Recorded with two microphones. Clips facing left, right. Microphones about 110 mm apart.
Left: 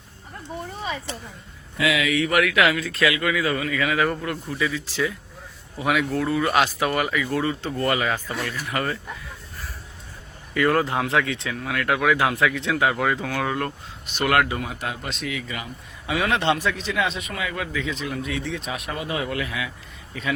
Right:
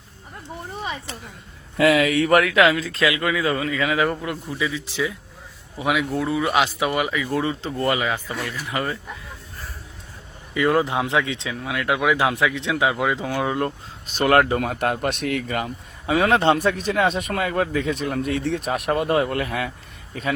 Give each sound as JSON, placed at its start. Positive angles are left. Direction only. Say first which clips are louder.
{"t": 1.8, "sound": "speech", "louder": "right 5 dB", "side_deg": -40}
{"t": 10.5, "sound": "speech", "louder": "right 1 dB", "side_deg": -15}
{"t": 14.2, "sound": "speech", "louder": "right 4 dB", "side_deg": -35}
{"t": 16.0, "sound": "speech", "louder": "right 4 dB", "side_deg": -35}